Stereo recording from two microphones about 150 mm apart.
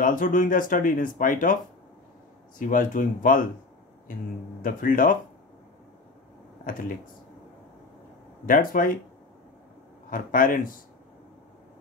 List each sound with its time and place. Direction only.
0.0 s speech: 65° left (ahead or behind)
2.6 s speech: 65° left (ahead or behind)
6.6 s speech: 65° left (ahead or behind)
8.5 s speech: 65° left (ahead or behind)
10.0 s speech: 65° left (ahead or behind)